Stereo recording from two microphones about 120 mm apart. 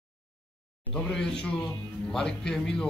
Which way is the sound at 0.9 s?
5° left (ahead or behind).